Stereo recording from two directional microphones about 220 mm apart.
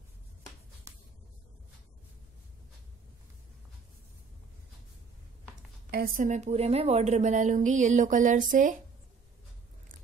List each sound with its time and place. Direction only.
5.9 s a woman's voice: 40° right (ahead or behind)